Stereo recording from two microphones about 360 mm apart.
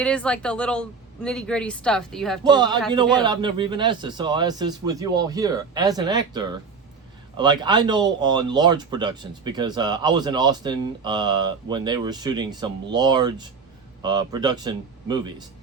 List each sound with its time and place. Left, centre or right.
0.0 s a woman's voice: centre
2.4 s speech: centre